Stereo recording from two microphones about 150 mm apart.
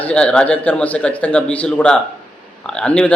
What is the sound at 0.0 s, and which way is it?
A man's voice, 10° left (ahead or behind).